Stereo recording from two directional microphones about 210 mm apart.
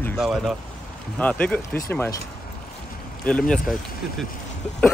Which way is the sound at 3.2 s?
5° left (ahead or behind).